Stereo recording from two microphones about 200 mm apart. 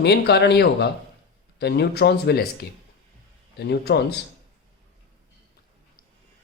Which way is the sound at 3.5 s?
55° left (ahead or behind).